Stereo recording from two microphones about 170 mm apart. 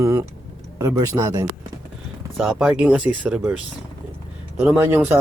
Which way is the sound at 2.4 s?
5° right (ahead or behind).